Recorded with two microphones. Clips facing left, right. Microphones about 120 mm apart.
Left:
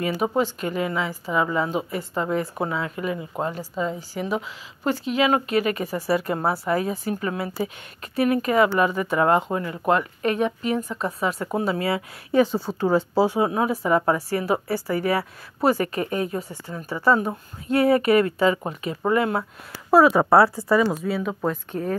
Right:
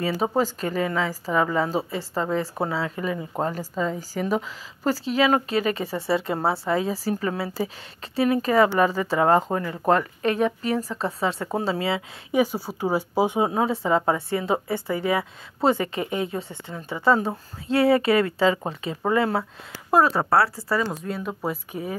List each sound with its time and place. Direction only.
0.2 s a woman's voice: 35° right (ahead or behind)
12.4 s speech: 10° right (ahead or behind)
13.5 s speech: 30° right (ahead or behind)
19.9 s speech: 10° left (ahead or behind)
20.9 s speech: 5° left (ahead or behind)
21.5 s speech: 10° right (ahead or behind)